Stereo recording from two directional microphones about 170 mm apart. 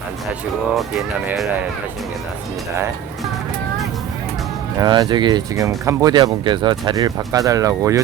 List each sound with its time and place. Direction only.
0.8 s speech: centre (ahead or behind)
4.8 s speech: 25° right (ahead or behind)